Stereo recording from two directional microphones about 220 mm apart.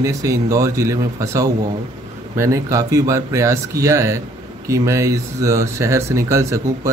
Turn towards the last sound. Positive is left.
turn(degrees=-15)  # may be behind; listen again after turning